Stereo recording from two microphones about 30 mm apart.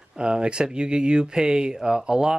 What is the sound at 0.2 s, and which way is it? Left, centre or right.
Speech, right.